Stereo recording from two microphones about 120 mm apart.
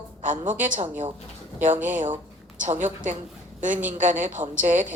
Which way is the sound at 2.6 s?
90° right.